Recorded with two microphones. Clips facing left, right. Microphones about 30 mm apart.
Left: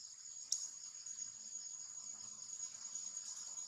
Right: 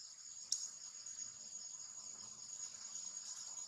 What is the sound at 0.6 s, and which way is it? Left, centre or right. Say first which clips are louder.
Insect: even; centre.